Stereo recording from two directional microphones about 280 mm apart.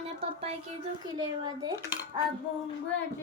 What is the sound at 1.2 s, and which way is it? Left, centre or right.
Speech, centre.